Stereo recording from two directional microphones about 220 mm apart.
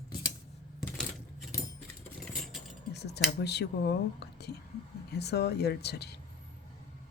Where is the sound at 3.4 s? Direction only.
50° left (ahead or behind).